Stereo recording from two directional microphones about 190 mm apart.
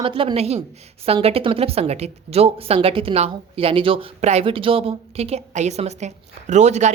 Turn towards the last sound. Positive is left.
turn(degrees=-35)  # may be behind; listen again after turning